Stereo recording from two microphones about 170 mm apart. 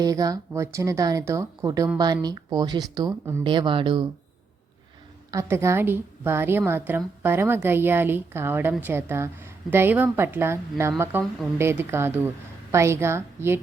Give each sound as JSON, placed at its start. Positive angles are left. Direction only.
{"t": 0.0, "sound": "speech", "side_deg": -20}
{"t": 5.3, "sound": "a woman's voice", "side_deg": -15}